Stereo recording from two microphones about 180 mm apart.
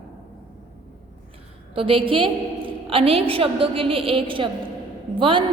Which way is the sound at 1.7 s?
30° right (ahead or behind).